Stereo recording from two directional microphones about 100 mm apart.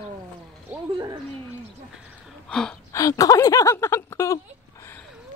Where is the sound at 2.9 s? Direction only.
35° left (ahead or behind).